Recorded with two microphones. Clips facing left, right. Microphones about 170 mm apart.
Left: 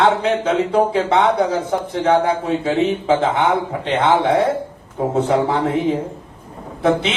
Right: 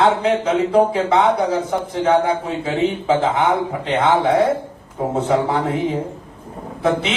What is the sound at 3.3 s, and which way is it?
Speech, 30° left (ahead or behind).